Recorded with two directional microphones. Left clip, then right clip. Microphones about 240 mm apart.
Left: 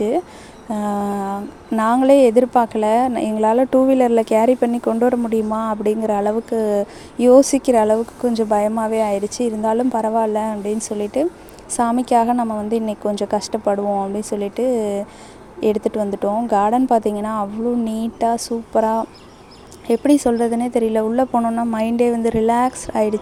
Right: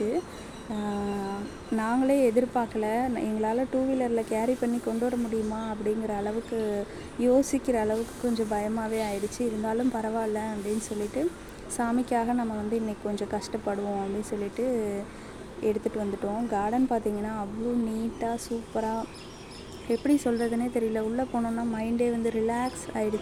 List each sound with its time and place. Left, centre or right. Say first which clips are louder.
0.7 s a woman's voice: left 11 dB; left